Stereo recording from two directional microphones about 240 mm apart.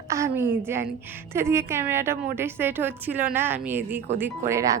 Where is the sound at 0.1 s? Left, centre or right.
Centre.